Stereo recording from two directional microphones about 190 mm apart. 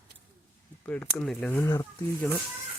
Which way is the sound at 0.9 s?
10° left (ahead or behind).